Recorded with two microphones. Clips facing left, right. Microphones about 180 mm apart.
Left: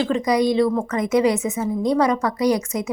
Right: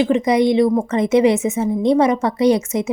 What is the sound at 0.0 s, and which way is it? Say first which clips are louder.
A woman's voice: right 4 dB; 25° right (ahead or behind).